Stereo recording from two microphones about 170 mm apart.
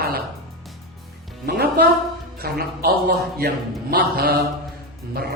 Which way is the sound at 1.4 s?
70° right (ahead or behind).